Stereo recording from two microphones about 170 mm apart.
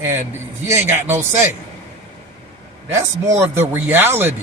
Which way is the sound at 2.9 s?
15° right (ahead or behind).